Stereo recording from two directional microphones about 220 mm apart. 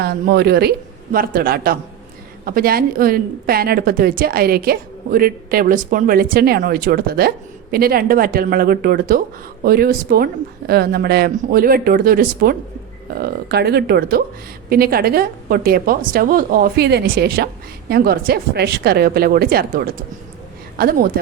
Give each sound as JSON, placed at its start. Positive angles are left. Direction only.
{"t": 0.0, "sound": "a woman's voice", "side_deg": -45}